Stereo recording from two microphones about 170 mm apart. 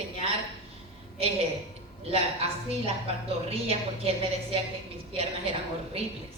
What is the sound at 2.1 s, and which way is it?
A woman's voice, 35° right (ahead or behind).